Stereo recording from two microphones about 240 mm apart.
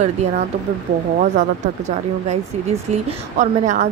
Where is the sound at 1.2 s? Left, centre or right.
Right.